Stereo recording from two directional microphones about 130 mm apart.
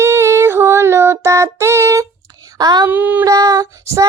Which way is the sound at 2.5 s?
30° right (ahead or behind).